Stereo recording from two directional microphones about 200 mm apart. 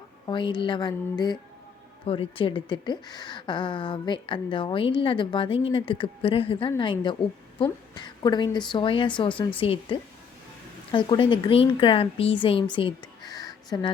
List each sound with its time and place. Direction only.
0.3 s a woman's voice: 25° left (ahead or behind)
7.9 s a woman's voice: 20° left (ahead or behind)